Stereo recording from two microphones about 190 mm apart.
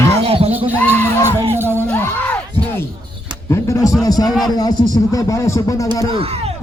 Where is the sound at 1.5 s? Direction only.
15° right (ahead or behind).